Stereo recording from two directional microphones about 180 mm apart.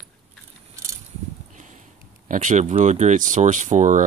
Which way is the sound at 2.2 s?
45° right (ahead or behind).